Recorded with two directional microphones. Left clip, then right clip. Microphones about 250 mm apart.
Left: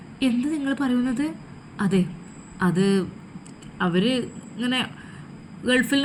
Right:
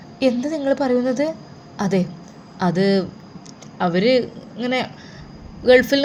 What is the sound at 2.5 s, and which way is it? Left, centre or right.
A man's voice, centre.